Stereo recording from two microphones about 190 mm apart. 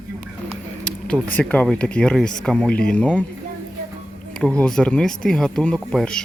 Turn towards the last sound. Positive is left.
turn(degrees=5)  # may be behind; listen again after turning